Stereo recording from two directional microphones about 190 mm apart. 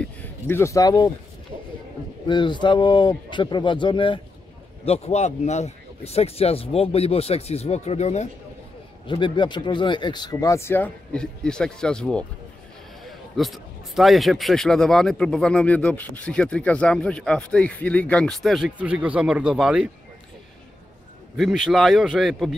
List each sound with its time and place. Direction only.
0.0 s speech: 10° left (ahead or behind)
2.2 s speech: 25° left (ahead or behind)
9.0 s speech: 25° left (ahead or behind); by 19.9 s 5° right (ahead or behind)
21.4 s speech: centre (ahead or behind)